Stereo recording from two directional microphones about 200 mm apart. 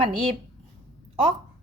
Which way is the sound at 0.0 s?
30° right (ahead or behind).